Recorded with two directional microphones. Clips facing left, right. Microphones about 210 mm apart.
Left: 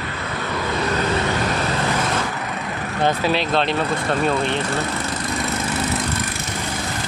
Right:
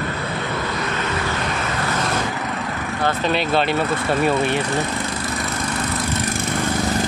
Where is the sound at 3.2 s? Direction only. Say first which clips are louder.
Even; centre (ahead or behind).